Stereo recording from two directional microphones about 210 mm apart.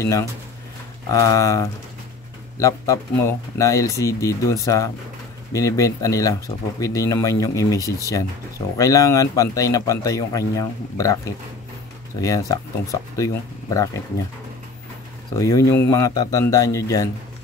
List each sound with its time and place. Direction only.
0.0 s speech: 15° left (ahead or behind)
15.3 s speech: 15° left (ahead or behind)